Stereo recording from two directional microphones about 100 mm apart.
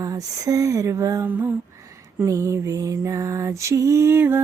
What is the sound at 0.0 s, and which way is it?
Mantra, 35° right (ahead or behind).